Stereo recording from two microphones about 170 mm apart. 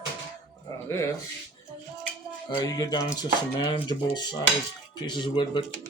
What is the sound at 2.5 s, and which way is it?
Speech, 25° left (ahead or behind).